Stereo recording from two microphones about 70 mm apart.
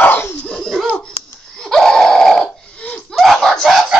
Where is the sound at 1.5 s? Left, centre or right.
Centre.